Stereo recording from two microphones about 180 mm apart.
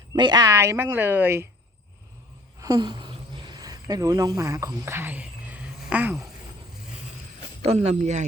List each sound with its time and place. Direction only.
0.2 s speech: 25° right (ahead or behind)
2.6 s a sound: 20° right (ahead or behind)
7.6 s speech: 35° right (ahead or behind)